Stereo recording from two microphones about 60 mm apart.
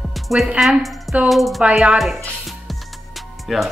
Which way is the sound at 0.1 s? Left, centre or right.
Centre.